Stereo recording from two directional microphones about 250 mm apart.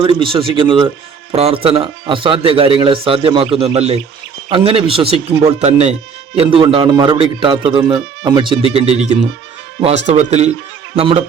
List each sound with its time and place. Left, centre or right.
0.0 s a man's voice: right